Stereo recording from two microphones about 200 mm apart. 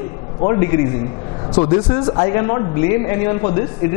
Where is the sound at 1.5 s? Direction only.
30° left (ahead or behind).